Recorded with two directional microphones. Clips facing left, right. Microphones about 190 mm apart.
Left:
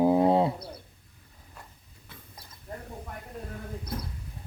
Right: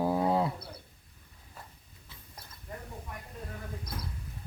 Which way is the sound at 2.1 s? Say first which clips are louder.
Left 5 dB; 55° left (ahead or behind).